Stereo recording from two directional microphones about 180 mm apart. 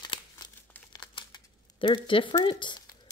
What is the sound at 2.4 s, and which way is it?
Speech, 25° left (ahead or behind).